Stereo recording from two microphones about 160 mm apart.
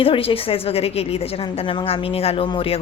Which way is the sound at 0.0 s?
35° left (ahead or behind).